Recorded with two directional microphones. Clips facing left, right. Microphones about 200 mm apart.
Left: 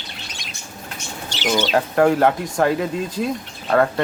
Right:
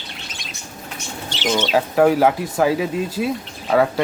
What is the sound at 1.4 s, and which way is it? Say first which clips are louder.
Speech: even; centre (ahead or behind).